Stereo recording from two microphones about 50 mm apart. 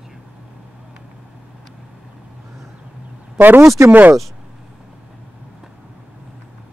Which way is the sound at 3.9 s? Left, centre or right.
Right.